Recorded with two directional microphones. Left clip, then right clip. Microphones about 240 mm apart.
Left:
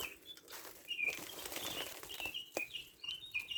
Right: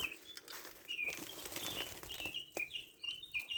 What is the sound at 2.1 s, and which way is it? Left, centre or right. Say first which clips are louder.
Bird: even; centre.